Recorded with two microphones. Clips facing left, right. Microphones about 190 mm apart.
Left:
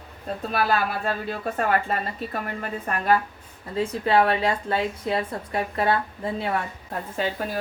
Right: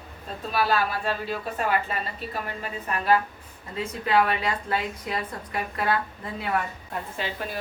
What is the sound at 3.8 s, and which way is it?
A woman's voice, 30° left (ahead or behind).